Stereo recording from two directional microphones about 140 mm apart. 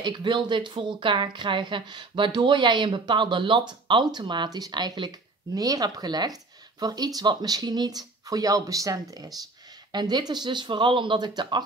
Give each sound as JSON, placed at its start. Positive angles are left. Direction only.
{"t": 0.0, "sound": "speech", "side_deg": -35}